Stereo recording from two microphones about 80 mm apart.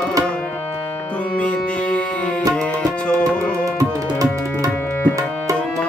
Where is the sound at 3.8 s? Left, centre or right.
Right.